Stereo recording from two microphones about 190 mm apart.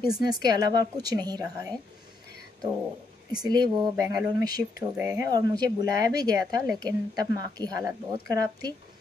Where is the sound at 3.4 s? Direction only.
20° right (ahead or behind).